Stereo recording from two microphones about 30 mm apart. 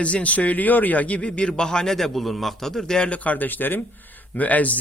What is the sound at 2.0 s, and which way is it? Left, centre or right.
Speech, centre.